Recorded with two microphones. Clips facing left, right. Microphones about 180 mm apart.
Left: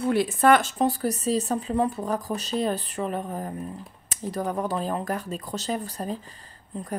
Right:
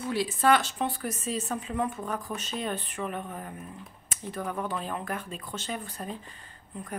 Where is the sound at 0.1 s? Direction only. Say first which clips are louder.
Left 4 dB; 55° left (ahead or behind).